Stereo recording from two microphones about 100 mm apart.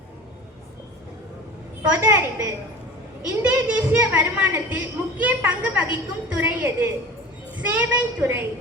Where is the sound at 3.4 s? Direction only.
15° right (ahead or behind).